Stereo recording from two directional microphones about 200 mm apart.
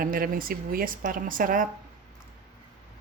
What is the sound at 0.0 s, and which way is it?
A woman's voice, 45° right (ahead or behind).